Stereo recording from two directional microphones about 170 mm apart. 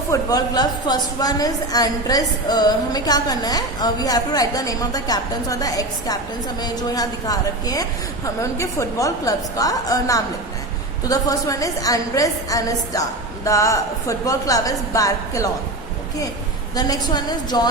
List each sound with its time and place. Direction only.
0.1 s a woman's voice: 20° left (ahead or behind)
16.7 s a woman's voice: 20° left (ahead or behind)